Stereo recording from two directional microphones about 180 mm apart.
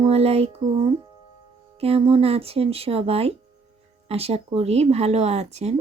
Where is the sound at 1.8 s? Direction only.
35° right (ahead or behind).